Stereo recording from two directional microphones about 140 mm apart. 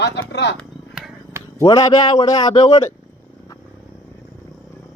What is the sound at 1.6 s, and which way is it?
A man's voice, 25° left (ahead or behind).